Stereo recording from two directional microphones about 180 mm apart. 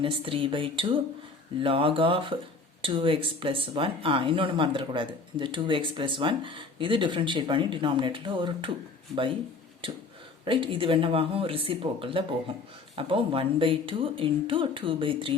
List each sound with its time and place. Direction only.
0.0 s speech: 30° right (ahead or behind)
9.8 s speech: 30° right (ahead or behind)